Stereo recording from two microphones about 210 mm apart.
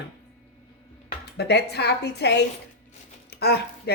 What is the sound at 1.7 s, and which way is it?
Speech, 50° left (ahead or behind).